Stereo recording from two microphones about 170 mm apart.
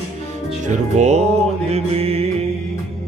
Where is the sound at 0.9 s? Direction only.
40° right (ahead or behind).